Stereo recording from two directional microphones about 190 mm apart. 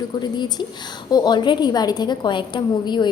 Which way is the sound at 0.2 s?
20° left (ahead or behind).